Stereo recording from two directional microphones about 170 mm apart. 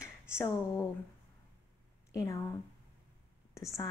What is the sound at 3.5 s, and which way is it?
Speech, 20° left (ahead or behind).